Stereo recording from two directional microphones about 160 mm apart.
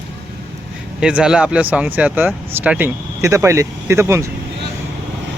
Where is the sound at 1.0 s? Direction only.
5° right (ahead or behind).